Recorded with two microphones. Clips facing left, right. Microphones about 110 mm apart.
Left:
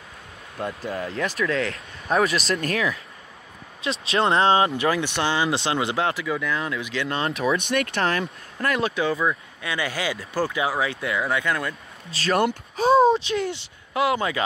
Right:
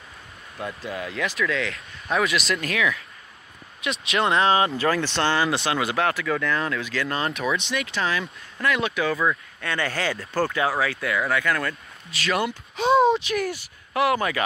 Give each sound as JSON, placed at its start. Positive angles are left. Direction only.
{"t": 0.8, "sound": "speech", "side_deg": 40}
{"t": 5.5, "sound": "speech", "side_deg": 25}
{"t": 7.5, "sound": "speech", "side_deg": 55}
{"t": 8.5, "sound": "speech", "side_deg": 35}
{"t": 9.2, "sound": "speech", "side_deg": 15}
{"t": 12.1, "sound": "speech", "side_deg": 35}
{"t": 12.7, "sound": "a sound", "side_deg": 40}
{"t": 13.2, "sound": "speech", "side_deg": 25}